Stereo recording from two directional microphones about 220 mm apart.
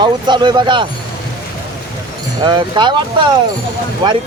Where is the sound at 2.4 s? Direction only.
20° right (ahead or behind).